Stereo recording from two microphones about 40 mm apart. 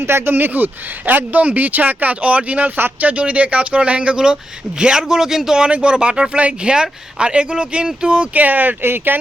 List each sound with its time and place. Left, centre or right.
0.0 s speech: right
4.8 s a man's voice: centre
8.3 s speech: right
8.8 s speech: right